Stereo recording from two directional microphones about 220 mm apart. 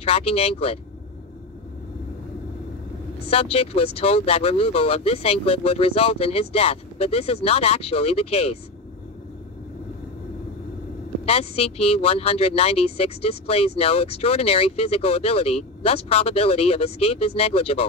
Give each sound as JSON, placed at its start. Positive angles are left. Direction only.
{"t": 0.0, "sound": "speech", "side_deg": 25}
{"t": 3.3, "sound": "speech", "side_deg": 25}
{"t": 11.2, "sound": "speech", "side_deg": 25}